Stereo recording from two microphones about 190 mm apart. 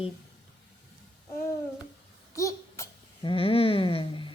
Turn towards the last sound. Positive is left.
turn(degrees=25)  # may be behind; listen again after turning